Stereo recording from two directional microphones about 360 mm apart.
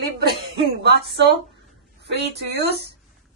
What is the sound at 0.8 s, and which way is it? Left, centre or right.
A woman's voice, right.